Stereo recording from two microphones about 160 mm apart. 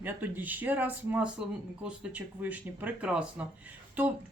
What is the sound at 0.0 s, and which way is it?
A woman's voice, 10° right (ahead or behind).